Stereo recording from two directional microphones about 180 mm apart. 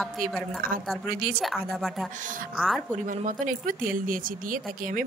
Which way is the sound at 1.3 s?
Centre (ahead or behind).